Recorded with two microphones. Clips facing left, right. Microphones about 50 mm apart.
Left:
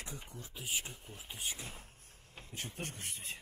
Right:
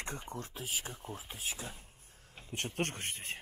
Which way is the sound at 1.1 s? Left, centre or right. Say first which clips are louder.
Right 5 dB; right.